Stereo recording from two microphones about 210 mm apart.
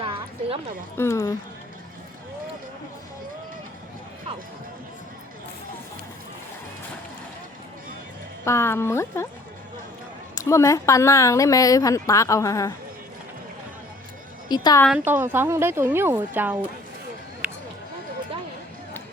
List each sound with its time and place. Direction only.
0.0 s a sound: 25° right (ahead or behind)
0.9 s a woman's voice: 15° left (ahead or behind)
8.4 s a woman's voice: 10° left (ahead or behind)
10.3 s a woman's voice: 15° left (ahead or behind)
14.5 s speech: 20° left (ahead or behind)
14.8 s a woman's voice: 10° right (ahead or behind)
17.4 s a sound: 5° right (ahead or behind)